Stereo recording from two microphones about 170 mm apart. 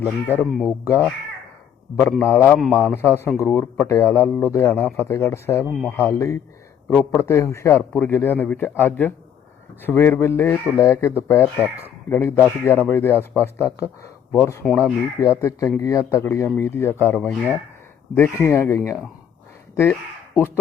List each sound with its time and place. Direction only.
0.0 s a man's voice: 10° left (ahead or behind)
5.6 s speech: centre (ahead or behind)
5.9 s a man's voice: 15° left (ahead or behind)